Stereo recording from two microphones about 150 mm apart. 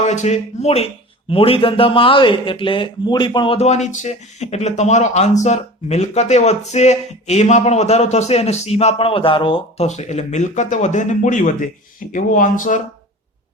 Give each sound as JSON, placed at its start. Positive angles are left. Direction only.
{"t": 0.0, "sound": "speech", "side_deg": 50}